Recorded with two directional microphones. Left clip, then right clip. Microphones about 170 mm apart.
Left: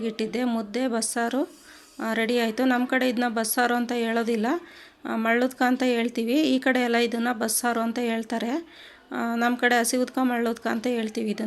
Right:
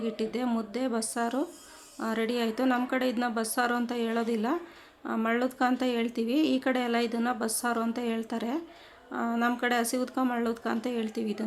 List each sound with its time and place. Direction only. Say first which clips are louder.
0.0 s speech: left 4 dB; 20° left (ahead or behind)